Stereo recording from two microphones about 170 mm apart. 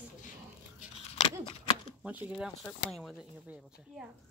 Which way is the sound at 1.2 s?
30° left (ahead or behind).